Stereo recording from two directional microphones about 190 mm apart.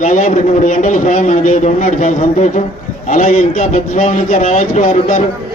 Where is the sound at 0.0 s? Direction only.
45° left (ahead or behind).